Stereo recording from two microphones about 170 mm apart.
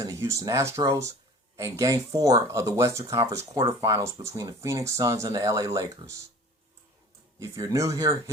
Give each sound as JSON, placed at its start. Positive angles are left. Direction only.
{"t": 0.0, "sound": "speech", "side_deg": -15}
{"t": 7.3, "sound": "speech", "side_deg": -20}